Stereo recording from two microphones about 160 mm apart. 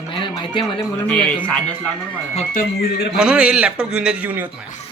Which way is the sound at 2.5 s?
70° left (ahead or behind).